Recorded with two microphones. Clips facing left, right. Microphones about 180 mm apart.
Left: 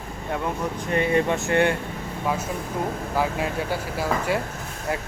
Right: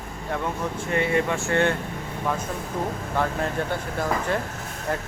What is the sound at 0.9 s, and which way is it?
Speech, 20° left (ahead or behind).